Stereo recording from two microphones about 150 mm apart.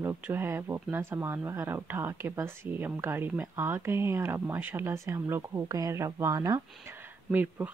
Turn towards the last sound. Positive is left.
turn(degrees=-15)  # may be behind; listen again after turning